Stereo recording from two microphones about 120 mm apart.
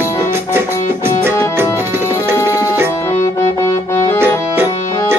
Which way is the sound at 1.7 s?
20° right (ahead or behind).